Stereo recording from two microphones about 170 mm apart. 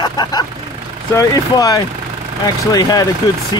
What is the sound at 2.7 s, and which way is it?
Speech, 20° left (ahead or behind).